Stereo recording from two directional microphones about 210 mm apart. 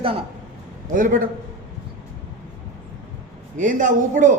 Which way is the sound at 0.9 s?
40° right (ahead or behind).